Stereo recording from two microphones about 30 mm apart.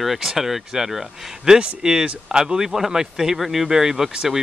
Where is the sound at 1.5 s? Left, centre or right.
Right.